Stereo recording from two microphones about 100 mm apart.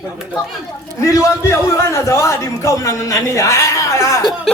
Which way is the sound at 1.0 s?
30° left (ahead or behind).